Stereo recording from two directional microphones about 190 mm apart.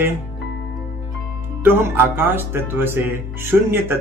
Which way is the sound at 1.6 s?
10° right (ahead or behind).